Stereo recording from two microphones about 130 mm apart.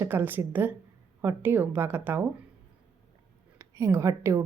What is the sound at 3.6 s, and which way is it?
Speech, 25° right (ahead or behind).